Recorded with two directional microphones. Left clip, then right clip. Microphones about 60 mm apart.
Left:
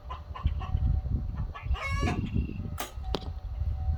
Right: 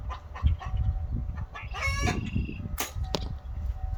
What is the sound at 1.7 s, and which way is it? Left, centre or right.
Chicken, right.